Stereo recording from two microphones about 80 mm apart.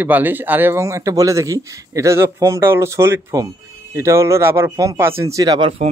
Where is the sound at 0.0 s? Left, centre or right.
Right.